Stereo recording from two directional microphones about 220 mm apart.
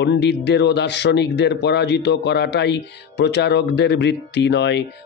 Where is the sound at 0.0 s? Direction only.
50° left (ahead or behind).